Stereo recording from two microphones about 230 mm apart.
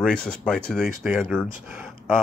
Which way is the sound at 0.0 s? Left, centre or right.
Centre.